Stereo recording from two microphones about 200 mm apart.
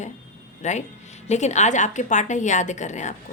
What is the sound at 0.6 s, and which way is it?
A woman's voice, 35° left (ahead or behind).